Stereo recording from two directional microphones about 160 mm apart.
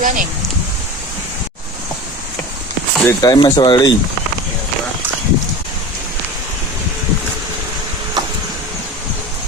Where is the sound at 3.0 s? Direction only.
20° left (ahead or behind).